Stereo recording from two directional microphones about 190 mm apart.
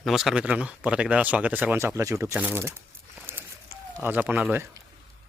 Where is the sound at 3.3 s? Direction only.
10° right (ahead or behind).